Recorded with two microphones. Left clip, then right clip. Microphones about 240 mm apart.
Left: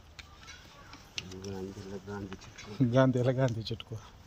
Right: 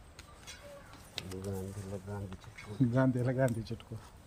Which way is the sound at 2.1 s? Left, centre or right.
Right.